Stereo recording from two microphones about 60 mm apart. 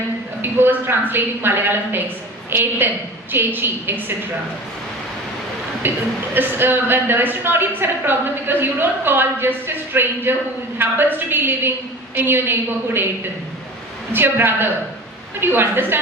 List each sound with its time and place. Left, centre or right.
0.4 s a woman's voice: right
5.8 s a woman's voice: right
14.1 s a woman's voice: right